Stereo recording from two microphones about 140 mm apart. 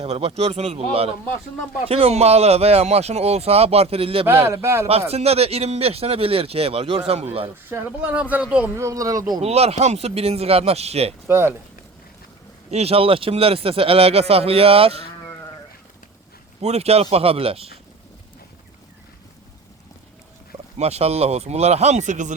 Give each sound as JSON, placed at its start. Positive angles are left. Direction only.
{"t": 0.0, "sound": "speech", "side_deg": -45}
{"t": 4.4, "sound": "speech", "side_deg": -20}
{"t": 4.9, "sound": "speech", "side_deg": -45}
{"t": 7.7, "sound": "speech", "side_deg": -10}
{"t": 8.7, "sound": "speech", "side_deg": -20}
{"t": 9.4, "sound": "speech", "side_deg": -45}
{"t": 11.3, "sound": "speech", "side_deg": -15}
{"t": 12.7, "sound": "speech", "side_deg": -45}
{"t": 16.6, "sound": "speech", "side_deg": -50}
{"t": 20.7, "sound": "speech", "side_deg": -50}